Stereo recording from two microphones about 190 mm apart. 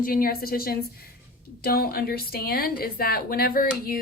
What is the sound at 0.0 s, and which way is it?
A woman's voice, 50° left (ahead or behind).